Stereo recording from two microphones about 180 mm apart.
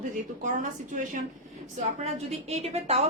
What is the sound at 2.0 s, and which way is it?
A woman's voice, 35° right (ahead or behind).